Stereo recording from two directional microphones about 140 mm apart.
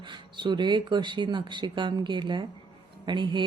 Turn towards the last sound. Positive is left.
turn(degrees=-35)  # may be behind; listen again after turning